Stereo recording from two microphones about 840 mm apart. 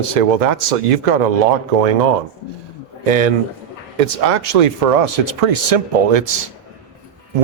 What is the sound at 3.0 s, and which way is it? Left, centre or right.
Speech, right.